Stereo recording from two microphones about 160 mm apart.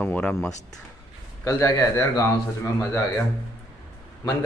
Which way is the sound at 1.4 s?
20° left (ahead or behind).